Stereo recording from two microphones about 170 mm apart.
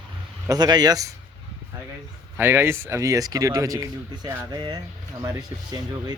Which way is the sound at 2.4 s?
15° right (ahead or behind).